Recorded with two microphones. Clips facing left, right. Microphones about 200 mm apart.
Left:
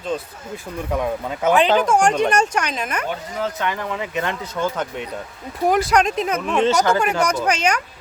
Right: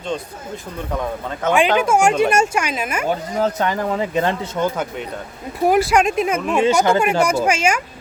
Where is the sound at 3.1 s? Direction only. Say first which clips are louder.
Right 6 dB; 40° right (ahead or behind).